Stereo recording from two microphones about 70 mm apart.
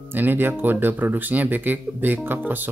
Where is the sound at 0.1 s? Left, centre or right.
Right.